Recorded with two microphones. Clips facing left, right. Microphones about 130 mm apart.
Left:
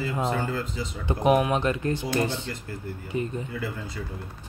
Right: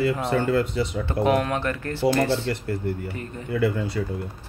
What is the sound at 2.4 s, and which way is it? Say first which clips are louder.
Speech: right 8 dB; 70° right (ahead or behind).